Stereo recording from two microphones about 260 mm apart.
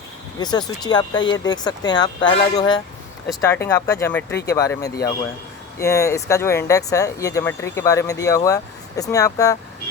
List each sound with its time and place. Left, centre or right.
0.3 s speech: centre